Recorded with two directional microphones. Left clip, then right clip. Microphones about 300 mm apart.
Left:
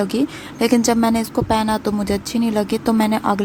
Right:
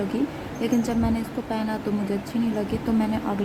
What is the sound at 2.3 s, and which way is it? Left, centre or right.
Speech, left.